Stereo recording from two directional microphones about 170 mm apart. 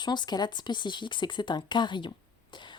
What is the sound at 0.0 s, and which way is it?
Speech, 25° left (ahead or behind).